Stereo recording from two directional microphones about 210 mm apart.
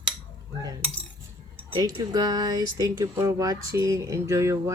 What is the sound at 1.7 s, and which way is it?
Speech, 20° right (ahead or behind).